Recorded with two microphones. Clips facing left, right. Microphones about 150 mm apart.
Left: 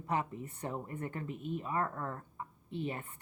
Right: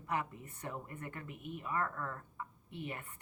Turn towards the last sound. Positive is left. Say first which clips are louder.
# left 6 dB
turn(degrees=30)  # may be behind; listen again after turning